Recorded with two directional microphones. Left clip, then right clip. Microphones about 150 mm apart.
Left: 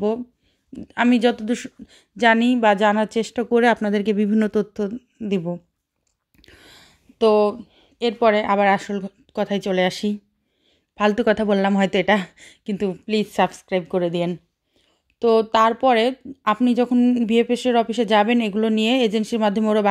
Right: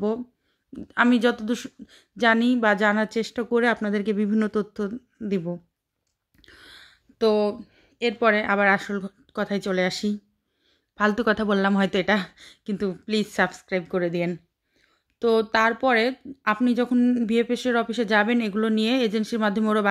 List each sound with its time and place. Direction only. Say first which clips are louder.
0.7 s speech: left 1 dB; 15° left (ahead or behind)